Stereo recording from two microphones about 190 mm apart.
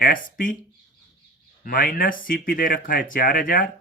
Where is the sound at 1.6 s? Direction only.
50° left (ahead or behind).